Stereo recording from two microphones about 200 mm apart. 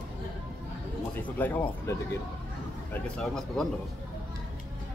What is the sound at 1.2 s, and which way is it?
Speech, 10° left (ahead or behind).